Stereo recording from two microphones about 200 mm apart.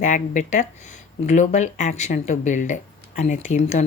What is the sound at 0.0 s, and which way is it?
Speech, 40° left (ahead or behind).